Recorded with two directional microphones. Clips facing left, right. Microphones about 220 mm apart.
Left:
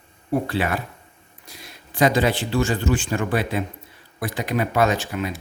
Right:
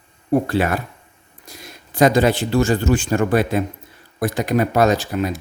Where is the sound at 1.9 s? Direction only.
45° right (ahead or behind).